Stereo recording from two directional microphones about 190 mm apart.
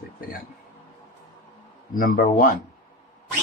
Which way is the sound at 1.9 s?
45° left (ahead or behind).